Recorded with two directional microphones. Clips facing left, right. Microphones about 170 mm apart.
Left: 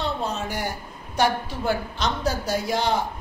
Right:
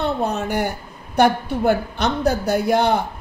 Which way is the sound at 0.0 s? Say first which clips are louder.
Right 6 dB; 60° right (ahead or behind).